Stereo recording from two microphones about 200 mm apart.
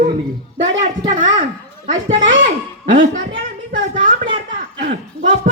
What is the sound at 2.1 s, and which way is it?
Speech, 70° right (ahead or behind).